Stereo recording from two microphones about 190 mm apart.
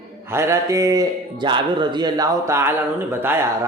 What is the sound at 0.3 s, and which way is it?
Speech, 15° right (ahead or behind).